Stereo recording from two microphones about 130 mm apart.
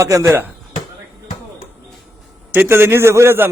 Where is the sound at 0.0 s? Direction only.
25° right (ahead or behind).